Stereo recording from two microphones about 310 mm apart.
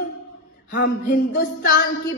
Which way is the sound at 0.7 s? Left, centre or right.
Left.